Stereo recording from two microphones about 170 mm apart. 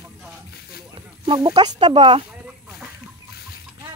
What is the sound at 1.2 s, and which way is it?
Speech, 25° right (ahead or behind).